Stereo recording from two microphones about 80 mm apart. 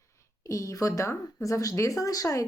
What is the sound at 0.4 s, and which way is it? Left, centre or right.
A woman's voice, left.